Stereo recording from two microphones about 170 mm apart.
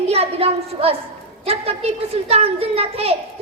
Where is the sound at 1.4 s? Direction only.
35° right (ahead or behind).